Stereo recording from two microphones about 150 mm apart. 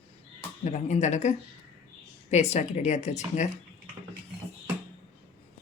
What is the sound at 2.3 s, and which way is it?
Speech, 50° left (ahead or behind).